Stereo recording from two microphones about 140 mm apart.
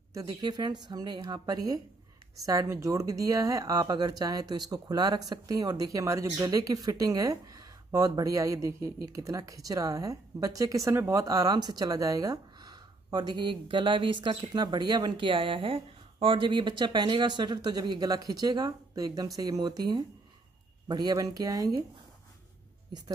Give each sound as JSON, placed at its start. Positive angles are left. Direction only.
{"t": 0.1, "sound": "speech", "side_deg": -25}